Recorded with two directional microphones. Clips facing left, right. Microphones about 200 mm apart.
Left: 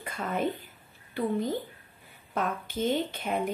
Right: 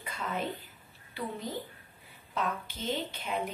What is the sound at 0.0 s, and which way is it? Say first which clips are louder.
A woman's voice: left 5 dB; 50° left (ahead or behind).